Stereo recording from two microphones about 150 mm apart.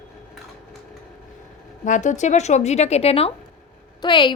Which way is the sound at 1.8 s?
55° left (ahead or behind).